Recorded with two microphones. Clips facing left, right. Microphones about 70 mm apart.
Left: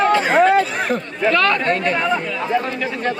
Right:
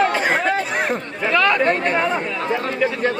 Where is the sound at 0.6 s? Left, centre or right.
Centre.